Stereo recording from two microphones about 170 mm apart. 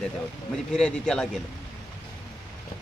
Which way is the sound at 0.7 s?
5° left (ahead or behind).